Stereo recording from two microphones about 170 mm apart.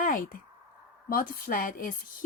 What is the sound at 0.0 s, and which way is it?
Speech, 55° left (ahead or behind).